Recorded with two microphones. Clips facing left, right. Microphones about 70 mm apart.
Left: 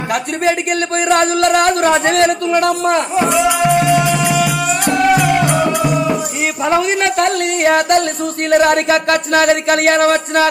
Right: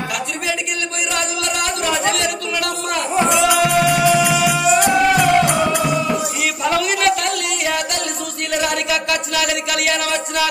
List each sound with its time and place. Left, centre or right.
1.0 s speech: left
3.3 s music: centre
4.0 s music: centre
6.6 s speech: left